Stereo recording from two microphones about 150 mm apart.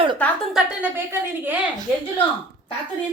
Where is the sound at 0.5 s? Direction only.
15° right (ahead or behind).